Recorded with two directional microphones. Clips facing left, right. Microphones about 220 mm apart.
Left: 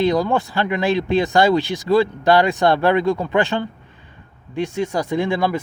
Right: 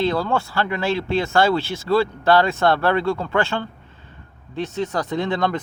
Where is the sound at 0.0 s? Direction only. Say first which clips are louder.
Left 3 dB; 15° left (ahead or behind).